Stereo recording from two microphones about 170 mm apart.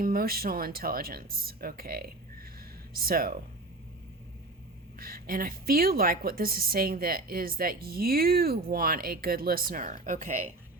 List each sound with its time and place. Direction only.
0.0 s a woman's voice: 60° right (ahead or behind)
4.9 s a woman's voice: 60° right (ahead or behind)